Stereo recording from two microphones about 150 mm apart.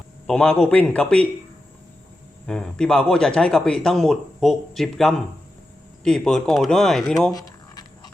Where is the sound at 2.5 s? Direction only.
5° left (ahead or behind).